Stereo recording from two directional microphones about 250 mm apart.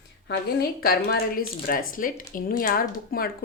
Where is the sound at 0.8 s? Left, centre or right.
Left.